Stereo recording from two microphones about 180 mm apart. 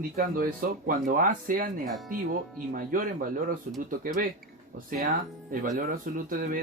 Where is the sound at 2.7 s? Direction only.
50° right (ahead or behind).